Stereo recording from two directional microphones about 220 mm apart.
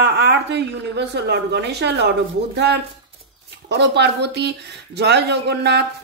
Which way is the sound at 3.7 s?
50° right (ahead or behind).